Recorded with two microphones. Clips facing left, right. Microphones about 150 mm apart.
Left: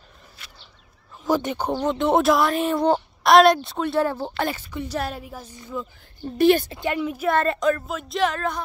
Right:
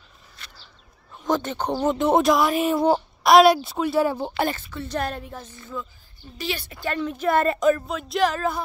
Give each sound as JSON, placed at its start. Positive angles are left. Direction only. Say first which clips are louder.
{"t": 1.1, "sound": "a sound", "louder": "left 2 dB", "side_deg": 5}
{"t": 1.7, "sound": "a woman's voice", "louder": "right 1 dB", "side_deg": -5}
{"t": 4.7, "sound": "a woman's voice", "louder": "even", "side_deg": 10}
{"t": 6.2, "sound": "a woman's voice", "louder": "left 14 dB", "side_deg": 50}
{"t": 6.7, "sound": "speech", "louder": "left 3 dB", "side_deg": 20}
{"t": 7.0, "sound": "a woman's voice", "louder": "left 1 dB", "side_deg": 10}
{"t": 7.2, "sound": "a woman's voice", "louder": "right 2 dB", "side_deg": 0}